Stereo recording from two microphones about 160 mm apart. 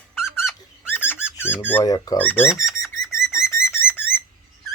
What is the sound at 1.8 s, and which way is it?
Speech, 25° left (ahead or behind).